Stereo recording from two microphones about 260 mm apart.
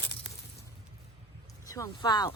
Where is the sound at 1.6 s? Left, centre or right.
Centre.